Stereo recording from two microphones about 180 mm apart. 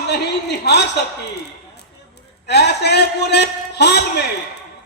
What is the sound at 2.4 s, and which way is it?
A man's voice, 70° left (ahead or behind).